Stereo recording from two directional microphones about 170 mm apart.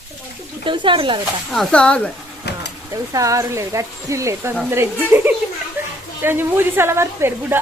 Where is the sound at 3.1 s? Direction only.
20° right (ahead or behind).